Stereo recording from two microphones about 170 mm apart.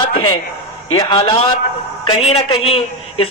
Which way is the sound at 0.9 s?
25° left (ahead or behind).